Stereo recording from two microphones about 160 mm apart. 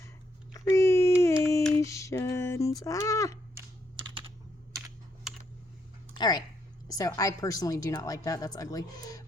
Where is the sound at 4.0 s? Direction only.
30° right (ahead or behind).